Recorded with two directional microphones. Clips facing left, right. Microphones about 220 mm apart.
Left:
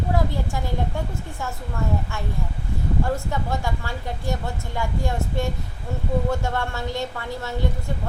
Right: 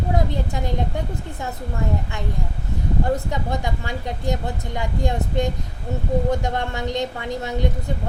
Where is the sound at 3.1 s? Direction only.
20° right (ahead or behind).